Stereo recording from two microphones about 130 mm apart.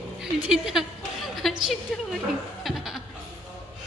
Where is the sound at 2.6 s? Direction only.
Centre (ahead or behind).